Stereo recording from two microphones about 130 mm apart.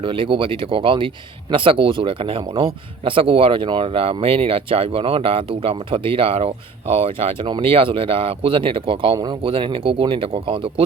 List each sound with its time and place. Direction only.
0.0 s speech: 40° right (ahead or behind)